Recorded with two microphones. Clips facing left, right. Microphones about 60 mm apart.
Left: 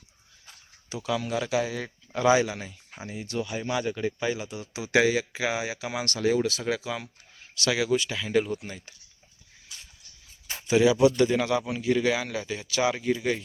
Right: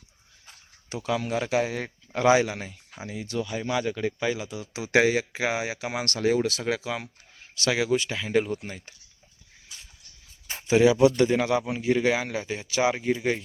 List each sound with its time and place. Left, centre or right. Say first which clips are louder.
0.9 s speech: right 1 dB; right
2.1 s a man's voice: right 1 dB; right
3.3 s speech: right 1 dB; centre
4.7 s speech: right 1 dB; right
7.3 s speech: right 1 dB; right
8.6 s speech: right 1 dB; right
10.7 s speech: right 1 dB; right